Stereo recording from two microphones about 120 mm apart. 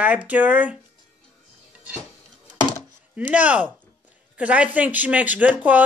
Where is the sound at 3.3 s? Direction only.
10° right (ahead or behind).